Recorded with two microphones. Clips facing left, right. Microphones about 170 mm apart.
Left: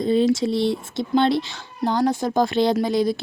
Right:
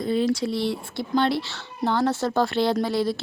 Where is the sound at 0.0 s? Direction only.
25° left (ahead or behind).